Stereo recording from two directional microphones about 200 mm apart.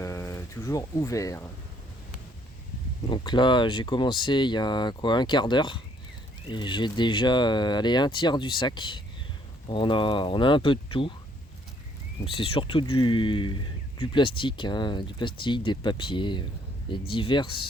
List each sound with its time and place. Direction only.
0.0 s a sound: 15° left (ahead or behind)
3.1 s speech: 25° left (ahead or behind)
12.2 s speech: 25° left (ahead or behind)